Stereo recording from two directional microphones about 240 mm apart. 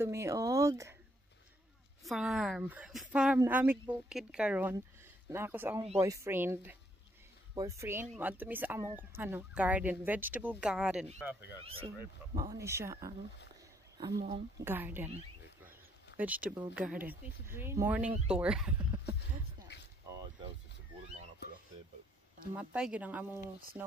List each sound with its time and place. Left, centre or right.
0.0 s speech: centre
2.0 s speech: centre
12.4 s speech: centre
14.6 s speech: centre
16.2 s speech: centre
20.1 s a sound: centre
22.6 s speech: centre